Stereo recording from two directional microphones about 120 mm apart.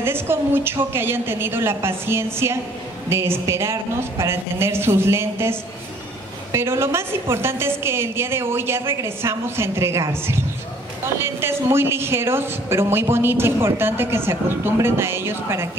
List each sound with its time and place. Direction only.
0.0 s speech: 20° right (ahead or behind)